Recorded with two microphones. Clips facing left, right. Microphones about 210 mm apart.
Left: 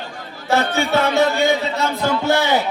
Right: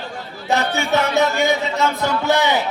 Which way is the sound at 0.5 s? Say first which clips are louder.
Left 2 dB; 20° right (ahead or behind).